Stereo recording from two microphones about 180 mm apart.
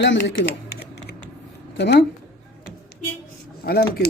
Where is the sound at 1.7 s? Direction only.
70° left (ahead or behind).